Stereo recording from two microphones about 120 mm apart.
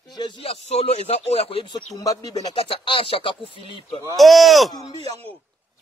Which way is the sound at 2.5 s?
50° left (ahead or behind).